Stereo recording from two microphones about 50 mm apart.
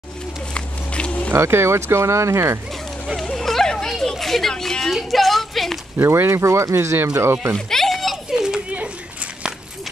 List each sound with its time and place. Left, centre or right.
0.6 s a sound: left
1.3 s speech: right
3.3 s chatter: centre
6.1 s speech: right
7.0 s speech: right
7.5 s a sound: centre
8.3 s children playing: centre
8.6 s children playing: right